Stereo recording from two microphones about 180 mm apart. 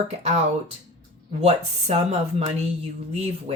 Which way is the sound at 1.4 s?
35° right (ahead or behind).